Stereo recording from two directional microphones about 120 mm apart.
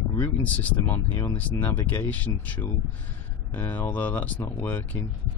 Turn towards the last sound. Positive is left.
turn(degrees=15)  # may be behind; listen again after turning